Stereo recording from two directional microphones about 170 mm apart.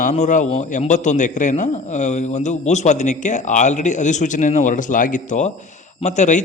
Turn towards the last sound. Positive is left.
turn(degrees=45)  # may be behind; listen again after turning